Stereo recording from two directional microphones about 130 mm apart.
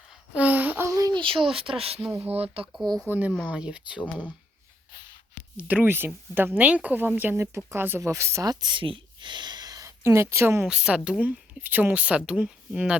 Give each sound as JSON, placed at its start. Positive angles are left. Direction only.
{"t": 0.3, "sound": "a sound", "side_deg": -10}
{"t": 0.9, "sound": "a sound", "side_deg": -25}
{"t": 1.2, "sound": "speech", "side_deg": -40}
{"t": 3.1, "sound": "speech", "side_deg": -15}
{"t": 5.5, "sound": "speech", "side_deg": -15}
{"t": 10.7, "sound": "speech", "side_deg": -5}